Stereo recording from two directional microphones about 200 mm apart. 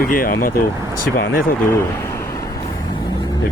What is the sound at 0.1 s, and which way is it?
Speech, 45° left (ahead or behind).